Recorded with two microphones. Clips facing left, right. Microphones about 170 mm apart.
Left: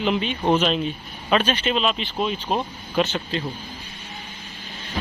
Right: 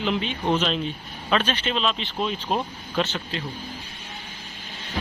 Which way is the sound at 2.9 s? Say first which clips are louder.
Left 4 dB; 15° left (ahead or behind).